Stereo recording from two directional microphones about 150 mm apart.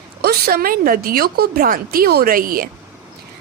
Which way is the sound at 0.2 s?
85° right.